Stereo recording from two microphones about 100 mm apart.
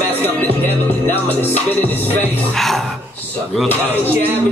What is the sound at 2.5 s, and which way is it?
Speech, centre (ahead or behind).